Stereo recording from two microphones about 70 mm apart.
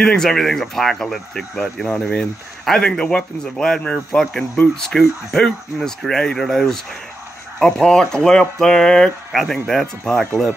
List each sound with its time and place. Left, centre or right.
0.0 s speech: centre